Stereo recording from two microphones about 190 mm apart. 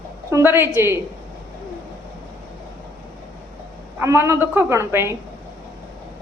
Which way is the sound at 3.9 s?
15° right (ahead or behind).